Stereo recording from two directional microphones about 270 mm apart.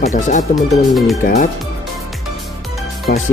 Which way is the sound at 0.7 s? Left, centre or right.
Centre.